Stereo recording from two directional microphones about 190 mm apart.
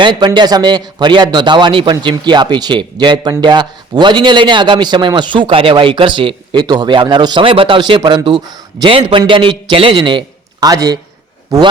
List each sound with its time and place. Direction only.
0.0 s a man's voice: 20° right (ahead or behind)